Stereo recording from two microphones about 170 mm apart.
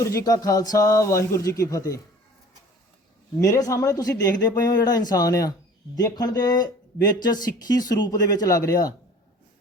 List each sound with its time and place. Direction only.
0.0 s speech: 20° left (ahead or behind)
3.4 s speech: 20° left (ahead or behind)